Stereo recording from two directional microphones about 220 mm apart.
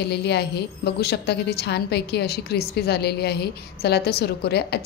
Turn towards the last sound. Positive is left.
turn(degrees=45)  # may be behind; listen again after turning